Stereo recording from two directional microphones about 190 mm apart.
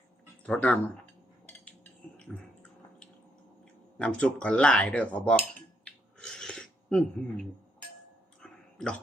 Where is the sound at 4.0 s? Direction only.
5° left (ahead or behind).